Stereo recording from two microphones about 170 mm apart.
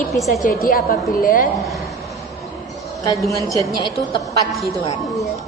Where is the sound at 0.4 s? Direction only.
55° left (ahead or behind).